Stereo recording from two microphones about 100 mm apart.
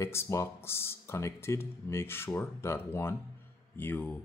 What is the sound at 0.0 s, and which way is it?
Speech, 30° left (ahead or behind).